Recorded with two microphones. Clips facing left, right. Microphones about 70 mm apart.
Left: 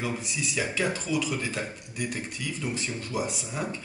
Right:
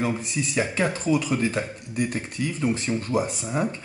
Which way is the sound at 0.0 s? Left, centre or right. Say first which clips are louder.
Right 5 dB; right.